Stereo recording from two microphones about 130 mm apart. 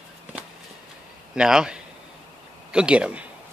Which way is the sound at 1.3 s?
5° right (ahead or behind).